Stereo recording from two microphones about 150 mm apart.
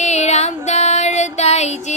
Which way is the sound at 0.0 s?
50° left (ahead or behind).